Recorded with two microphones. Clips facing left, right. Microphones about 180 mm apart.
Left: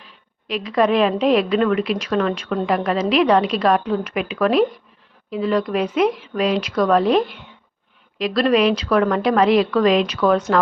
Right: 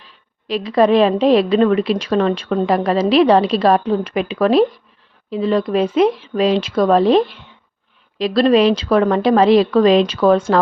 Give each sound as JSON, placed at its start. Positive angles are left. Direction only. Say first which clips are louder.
{"t": 0.4, "sound": "a woman's voice", "louder": "right 4 dB", "side_deg": -35}